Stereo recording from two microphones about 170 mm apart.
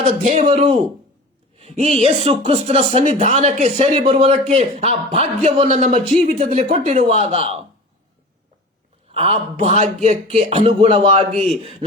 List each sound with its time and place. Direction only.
0.0 s speech: 40° right (ahead or behind)
9.1 s speech: 35° right (ahead or behind)